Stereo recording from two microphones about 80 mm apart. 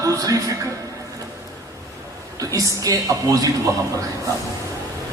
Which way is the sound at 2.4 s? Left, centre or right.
Right.